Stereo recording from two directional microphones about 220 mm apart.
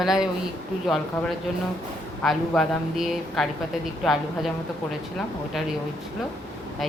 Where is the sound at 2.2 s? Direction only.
Centre (ahead or behind).